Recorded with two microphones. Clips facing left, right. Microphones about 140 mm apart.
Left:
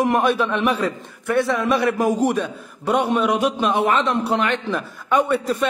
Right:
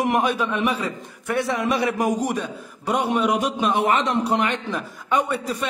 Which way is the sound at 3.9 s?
55° left (ahead or behind).